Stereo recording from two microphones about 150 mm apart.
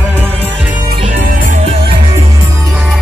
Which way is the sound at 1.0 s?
65° right (ahead or behind).